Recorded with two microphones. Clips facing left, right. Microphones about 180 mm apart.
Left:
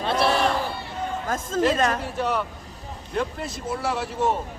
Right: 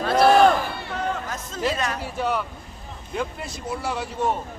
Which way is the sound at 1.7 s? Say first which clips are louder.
Left 5 dB; 45° left (ahead or behind).